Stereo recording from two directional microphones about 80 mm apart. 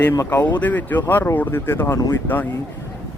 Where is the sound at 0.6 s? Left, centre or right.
Left.